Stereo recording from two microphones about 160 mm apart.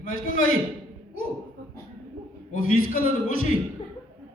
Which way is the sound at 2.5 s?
60° left (ahead or behind).